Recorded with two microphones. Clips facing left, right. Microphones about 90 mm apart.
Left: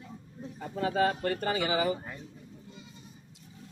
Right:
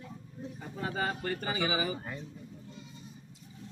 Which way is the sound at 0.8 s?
70° left (ahead or behind).